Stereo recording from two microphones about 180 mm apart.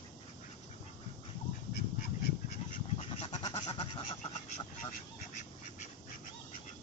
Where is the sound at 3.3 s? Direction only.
20° left (ahead or behind).